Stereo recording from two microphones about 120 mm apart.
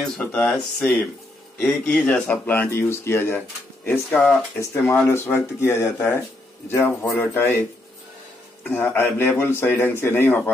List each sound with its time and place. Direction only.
0.0 s speech: 15° left (ahead or behind)
4.6 s a man's voice: 20° left (ahead or behind)
8.6 s a man's voice: 15° left (ahead or behind)